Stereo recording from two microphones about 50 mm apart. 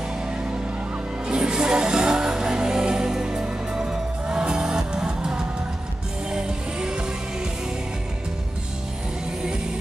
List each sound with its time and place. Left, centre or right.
1.2 s music: centre